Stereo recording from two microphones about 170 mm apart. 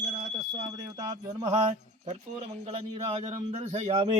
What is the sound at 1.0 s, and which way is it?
Speech, 25° right (ahead or behind).